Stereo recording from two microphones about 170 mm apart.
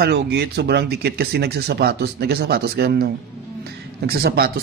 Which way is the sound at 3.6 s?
65° right (ahead or behind).